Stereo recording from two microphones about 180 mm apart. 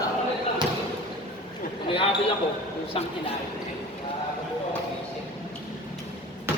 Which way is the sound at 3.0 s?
30° left (ahead or behind).